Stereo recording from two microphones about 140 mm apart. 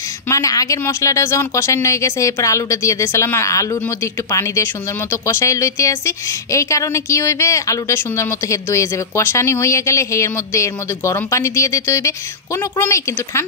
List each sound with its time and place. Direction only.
0.3 s a woman's voice: 25° left (ahead or behind)